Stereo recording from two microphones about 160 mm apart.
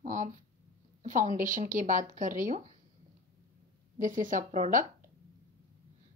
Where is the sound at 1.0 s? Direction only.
55° right (ahead or behind).